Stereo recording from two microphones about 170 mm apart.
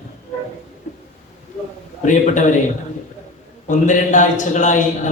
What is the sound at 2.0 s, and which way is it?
Speech, 50° left (ahead or behind).